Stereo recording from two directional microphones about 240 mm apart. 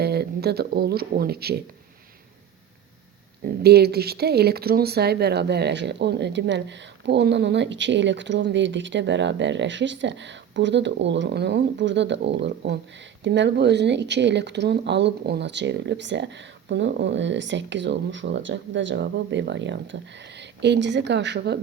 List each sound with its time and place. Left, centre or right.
0.0 s speech: right
3.4 s speech: right